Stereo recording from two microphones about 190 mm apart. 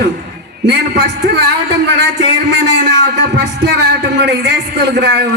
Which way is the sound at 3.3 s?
60° right (ahead or behind).